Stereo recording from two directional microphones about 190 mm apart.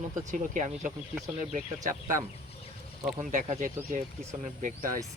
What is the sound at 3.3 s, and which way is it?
A man's voice, 40° right (ahead or behind).